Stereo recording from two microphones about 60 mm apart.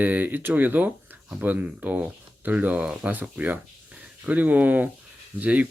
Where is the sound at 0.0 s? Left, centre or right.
Right.